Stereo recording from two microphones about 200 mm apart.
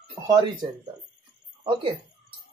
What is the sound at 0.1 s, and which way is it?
Speech, 20° right (ahead or behind).